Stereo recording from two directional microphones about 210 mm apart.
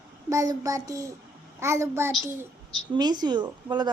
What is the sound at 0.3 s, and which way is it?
Child singing, 15° right (ahead or behind).